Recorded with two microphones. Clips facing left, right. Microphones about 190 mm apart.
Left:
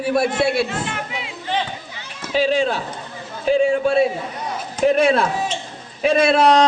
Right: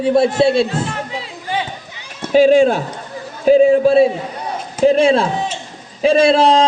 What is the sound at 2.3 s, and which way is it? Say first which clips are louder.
A man's voice: right 8 dB; 45° right (ahead or behind).